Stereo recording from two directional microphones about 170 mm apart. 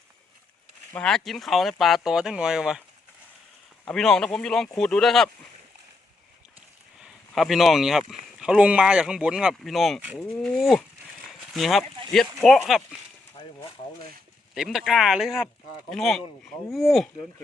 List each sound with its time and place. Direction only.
0.9 s speech: 5° left (ahead or behind)
3.8 s speech: 5° left (ahead or behind)
7.0 s speech: centre (ahead or behind)
14.5 s speech: 5° right (ahead or behind)